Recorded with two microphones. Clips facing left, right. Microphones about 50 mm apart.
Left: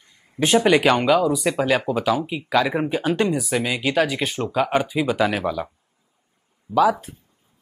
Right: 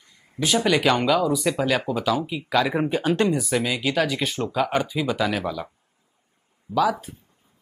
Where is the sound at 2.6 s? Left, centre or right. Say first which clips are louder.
Left 1 dB; centre.